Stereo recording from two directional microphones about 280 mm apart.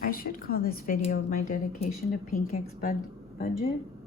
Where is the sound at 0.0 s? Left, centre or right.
Left.